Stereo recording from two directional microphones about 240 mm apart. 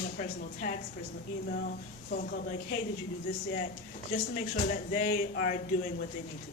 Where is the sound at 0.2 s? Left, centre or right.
Left.